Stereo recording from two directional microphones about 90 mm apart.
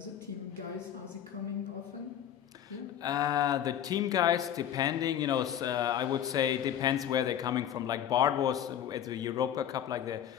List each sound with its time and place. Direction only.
3.0 s speech: 45° right (ahead or behind)